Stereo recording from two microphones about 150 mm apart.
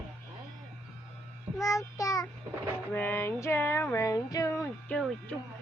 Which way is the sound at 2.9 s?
15° left (ahead or behind).